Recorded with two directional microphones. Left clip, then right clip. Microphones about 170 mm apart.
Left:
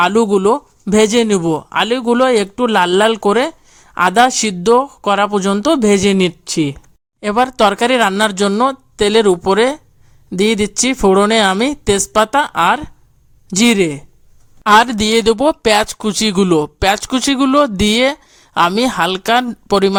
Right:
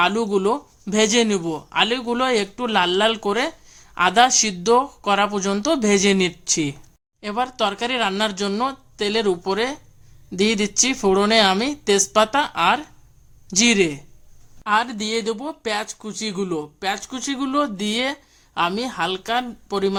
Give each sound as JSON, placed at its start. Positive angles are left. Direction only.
{"t": 0.0, "sound": "speech", "side_deg": 40}
{"t": 7.2, "sound": "speech", "side_deg": 45}
{"t": 14.6, "sound": "speech", "side_deg": 55}